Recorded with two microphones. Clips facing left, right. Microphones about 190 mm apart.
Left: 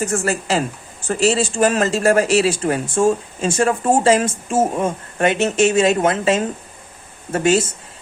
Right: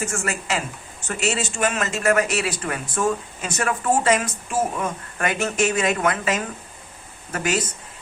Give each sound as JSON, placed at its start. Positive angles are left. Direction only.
{"t": 0.0, "sound": "speech", "side_deg": 35}